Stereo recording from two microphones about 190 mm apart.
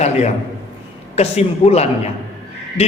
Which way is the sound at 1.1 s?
35° left (ahead or behind).